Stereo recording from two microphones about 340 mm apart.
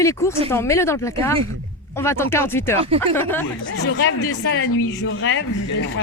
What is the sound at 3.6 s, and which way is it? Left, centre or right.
Speech, left.